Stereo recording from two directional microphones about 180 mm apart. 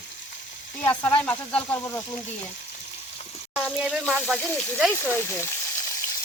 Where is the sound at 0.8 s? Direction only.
10° left (ahead or behind).